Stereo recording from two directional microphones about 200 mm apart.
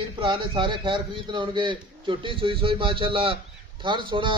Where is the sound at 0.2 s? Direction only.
25° right (ahead or behind).